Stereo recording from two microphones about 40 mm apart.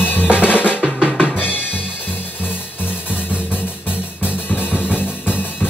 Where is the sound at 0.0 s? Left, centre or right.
Left.